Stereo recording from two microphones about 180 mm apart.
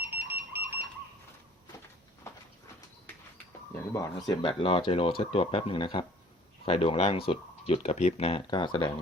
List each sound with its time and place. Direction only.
0.0 s alarm: 10° right (ahead or behind)
3.9 s speech: 20° left (ahead or behind)